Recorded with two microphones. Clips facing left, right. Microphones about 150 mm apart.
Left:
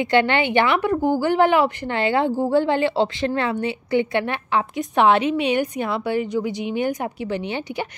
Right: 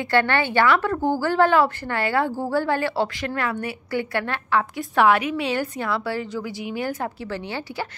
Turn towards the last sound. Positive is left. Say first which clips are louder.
# left 3 dB
turn(degrees=20)  # may be behind; listen again after turning